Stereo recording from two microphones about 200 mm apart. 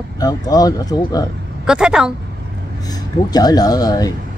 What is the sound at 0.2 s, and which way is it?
Speech, 20° left (ahead or behind).